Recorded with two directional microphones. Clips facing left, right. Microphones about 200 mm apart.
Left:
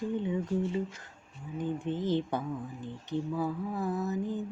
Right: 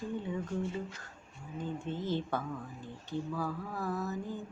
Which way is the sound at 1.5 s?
15° left (ahead or behind).